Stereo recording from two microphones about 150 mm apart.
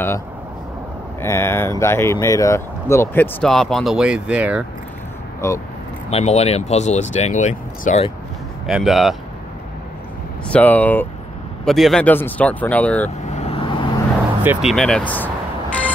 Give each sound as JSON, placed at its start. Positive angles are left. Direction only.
{"t": 1.2, "sound": "speech", "side_deg": 15}
{"t": 5.4, "sound": "speech", "side_deg": 20}
{"t": 6.0, "sound": "speech", "side_deg": 45}
{"t": 8.6, "sound": "speech", "side_deg": 0}
{"t": 10.5, "sound": "speech", "side_deg": 10}
{"t": 12.1, "sound": "speech", "side_deg": 10}
{"t": 13.2, "sound": "vehicle", "side_deg": 50}
{"t": 14.4, "sound": "speech", "side_deg": -5}